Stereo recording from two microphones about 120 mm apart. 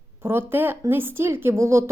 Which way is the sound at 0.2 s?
20° right (ahead or behind).